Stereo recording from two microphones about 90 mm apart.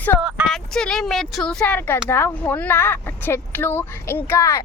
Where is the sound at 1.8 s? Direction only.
25° left (ahead or behind).